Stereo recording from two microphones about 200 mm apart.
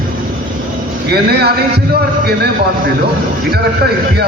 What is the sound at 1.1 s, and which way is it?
A man's voice, 50° right (ahead or behind).